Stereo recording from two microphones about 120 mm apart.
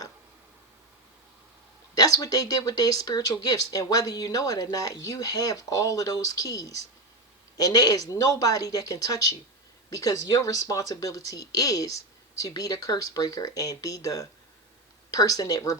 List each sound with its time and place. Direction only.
2.0 s speech: 30° left (ahead or behind)